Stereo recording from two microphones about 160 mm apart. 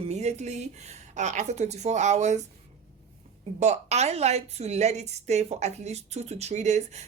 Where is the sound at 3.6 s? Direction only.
45° right (ahead or behind).